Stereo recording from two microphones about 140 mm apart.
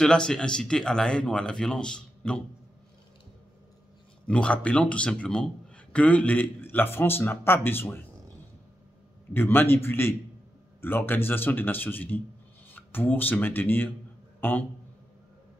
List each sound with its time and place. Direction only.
0.0 s speech: 5° left (ahead or behind)
4.3 s a man's voice: 10° left (ahead or behind)
9.3 s a man's voice: 15° left (ahead or behind)